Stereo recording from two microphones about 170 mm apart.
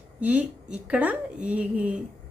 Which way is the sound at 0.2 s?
10° right (ahead or behind).